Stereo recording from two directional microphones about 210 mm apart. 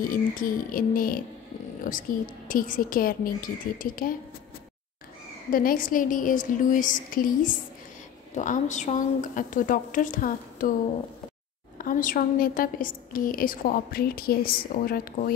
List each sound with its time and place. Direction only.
0.0 s a woman's voice: 40° left (ahead or behind)
5.5 s a woman's voice: 45° left (ahead or behind)
11.8 s a woman's voice: 40° left (ahead or behind)